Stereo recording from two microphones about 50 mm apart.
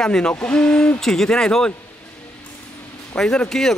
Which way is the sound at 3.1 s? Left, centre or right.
Left.